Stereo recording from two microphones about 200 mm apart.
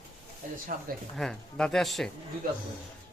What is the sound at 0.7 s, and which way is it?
Speech, 45° right (ahead or behind).